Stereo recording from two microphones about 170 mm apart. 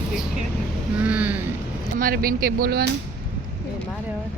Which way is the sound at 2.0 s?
60° right (ahead or behind).